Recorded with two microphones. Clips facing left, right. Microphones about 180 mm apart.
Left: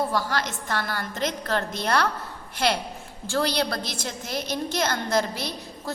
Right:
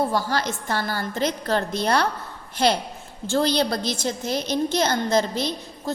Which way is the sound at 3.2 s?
25° right (ahead or behind).